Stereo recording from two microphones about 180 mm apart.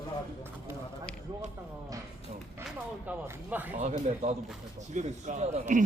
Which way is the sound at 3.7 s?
40° right (ahead or behind).